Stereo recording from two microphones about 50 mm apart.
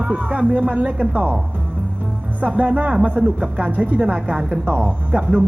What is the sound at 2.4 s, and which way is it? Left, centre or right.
Speech, right.